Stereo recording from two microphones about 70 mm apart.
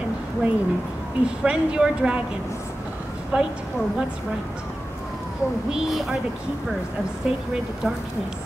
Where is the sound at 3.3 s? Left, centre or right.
Centre.